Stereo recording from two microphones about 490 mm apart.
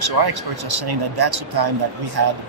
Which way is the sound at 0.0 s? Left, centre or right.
Right.